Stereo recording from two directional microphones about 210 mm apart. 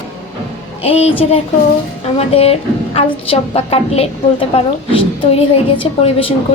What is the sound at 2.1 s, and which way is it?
A woman's voice, 30° left (ahead or behind).